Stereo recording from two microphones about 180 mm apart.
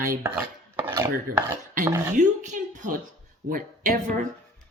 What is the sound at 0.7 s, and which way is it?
Dishes, 30° right (ahead or behind).